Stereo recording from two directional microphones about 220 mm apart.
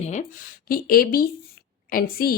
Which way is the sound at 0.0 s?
30° left (ahead or behind).